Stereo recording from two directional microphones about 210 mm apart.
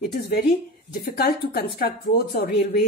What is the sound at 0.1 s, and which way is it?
A woman's voice, 50° left (ahead or behind).